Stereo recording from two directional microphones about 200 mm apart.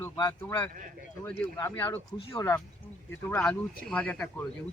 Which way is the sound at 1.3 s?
10° left (ahead or behind).